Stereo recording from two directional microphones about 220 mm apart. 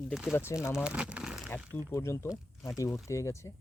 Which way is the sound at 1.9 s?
10° left (ahead or behind).